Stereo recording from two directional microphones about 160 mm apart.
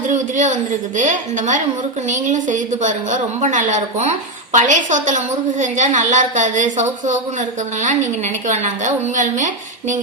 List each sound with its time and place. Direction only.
0.1 s a woman's voice: 50° right (ahead or behind)